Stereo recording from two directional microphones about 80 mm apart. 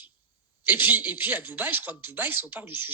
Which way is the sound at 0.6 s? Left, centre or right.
Right.